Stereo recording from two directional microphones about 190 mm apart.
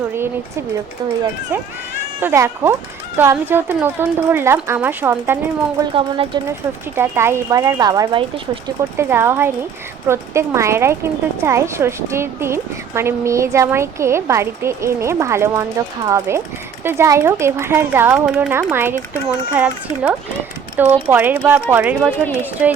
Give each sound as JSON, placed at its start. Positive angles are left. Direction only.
{"t": 2.2, "sound": "speech", "side_deg": -15}
{"t": 5.9, "sound": "speech", "side_deg": -30}
{"t": 6.9, "sound": "speech", "side_deg": -15}
{"t": 20.7, "sound": "speech", "side_deg": -10}